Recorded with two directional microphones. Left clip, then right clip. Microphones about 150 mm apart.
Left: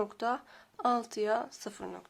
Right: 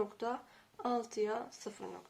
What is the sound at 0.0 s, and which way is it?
Speech, 55° left (ahead or behind).